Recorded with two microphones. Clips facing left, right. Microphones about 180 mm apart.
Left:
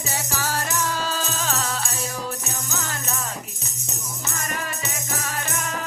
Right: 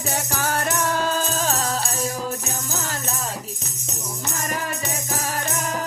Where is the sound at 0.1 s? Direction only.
55° right (ahead or behind).